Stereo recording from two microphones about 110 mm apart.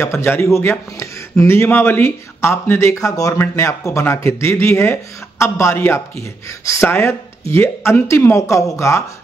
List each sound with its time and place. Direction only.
0.0 s speech: 20° left (ahead or behind)